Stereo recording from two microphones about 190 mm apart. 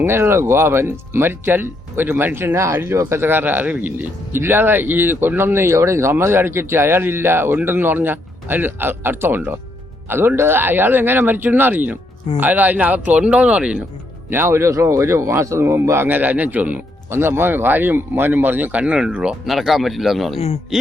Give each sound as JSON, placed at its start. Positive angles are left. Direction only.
{"t": 0.0, "sound": "speech", "side_deg": -15}